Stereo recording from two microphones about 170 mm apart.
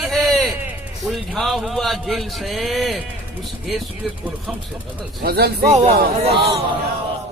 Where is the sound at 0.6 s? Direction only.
10° right (ahead or behind).